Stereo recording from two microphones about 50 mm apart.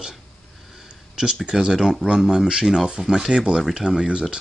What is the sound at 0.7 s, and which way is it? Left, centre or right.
Speech, centre.